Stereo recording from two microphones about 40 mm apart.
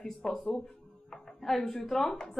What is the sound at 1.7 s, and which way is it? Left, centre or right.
Speech, centre.